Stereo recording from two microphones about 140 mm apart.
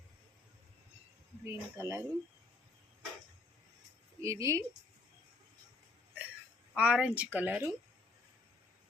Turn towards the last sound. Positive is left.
turn(degrees=-10)  # may be behind; listen again after turning